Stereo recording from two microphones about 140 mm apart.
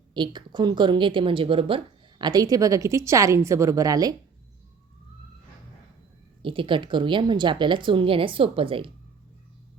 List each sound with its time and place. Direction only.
0.1 s a woman's voice: 35° right (ahead or behind)
6.4 s a woman's voice: 35° right (ahead or behind)